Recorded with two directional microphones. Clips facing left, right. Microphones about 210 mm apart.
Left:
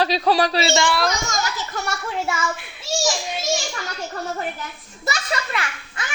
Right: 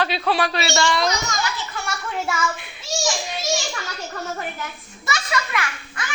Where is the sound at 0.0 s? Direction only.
40° left (ahead or behind).